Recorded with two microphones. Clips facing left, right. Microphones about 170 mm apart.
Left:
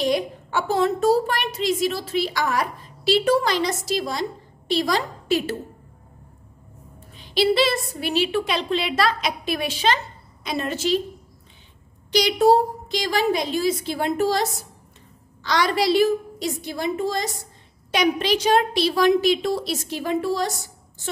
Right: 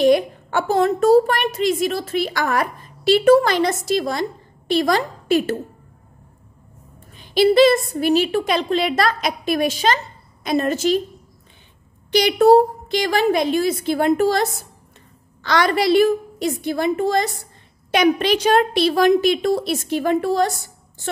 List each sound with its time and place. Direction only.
0.0 s a woman's voice: 55° right (ahead or behind)
7.2 s a woman's voice: 50° right (ahead or behind)
12.1 s a woman's voice: 55° right (ahead or behind)